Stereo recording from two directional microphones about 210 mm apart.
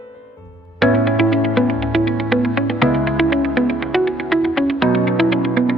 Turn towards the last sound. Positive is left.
turn(degrees=0)  # may be behind; listen again after turning